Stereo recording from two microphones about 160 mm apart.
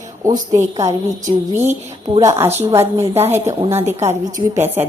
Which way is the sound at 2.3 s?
15° right (ahead or behind).